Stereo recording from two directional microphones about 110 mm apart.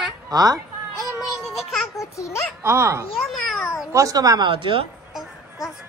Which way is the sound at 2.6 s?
25° right (ahead or behind).